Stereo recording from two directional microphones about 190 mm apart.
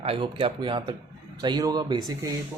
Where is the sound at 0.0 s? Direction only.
30° right (ahead or behind).